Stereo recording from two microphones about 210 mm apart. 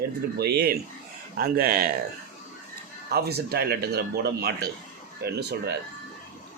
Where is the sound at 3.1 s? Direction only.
50° right (ahead or behind).